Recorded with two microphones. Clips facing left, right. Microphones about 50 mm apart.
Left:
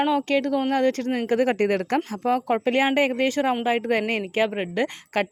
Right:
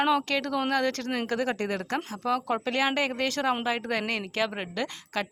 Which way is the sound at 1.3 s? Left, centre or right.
Left.